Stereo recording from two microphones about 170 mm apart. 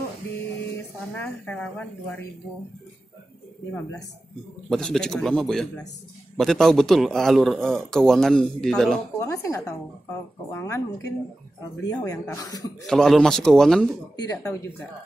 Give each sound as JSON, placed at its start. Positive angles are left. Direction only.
{"t": 1.1, "sound": "speech", "side_deg": 10}
{"t": 4.6, "sound": "a man's voice", "side_deg": 5}
{"t": 9.2, "sound": "speech", "side_deg": 15}
{"t": 12.8, "sound": "a man's voice", "side_deg": 0}
{"t": 14.1, "sound": "speech", "side_deg": 20}